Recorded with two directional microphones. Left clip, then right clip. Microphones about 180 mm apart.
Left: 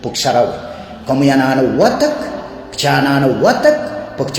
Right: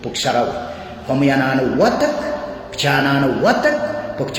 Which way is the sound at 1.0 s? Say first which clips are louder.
Left 4 dB; 40° left (ahead or behind).